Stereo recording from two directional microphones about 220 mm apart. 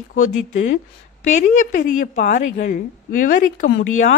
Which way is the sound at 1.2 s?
35° left (ahead or behind).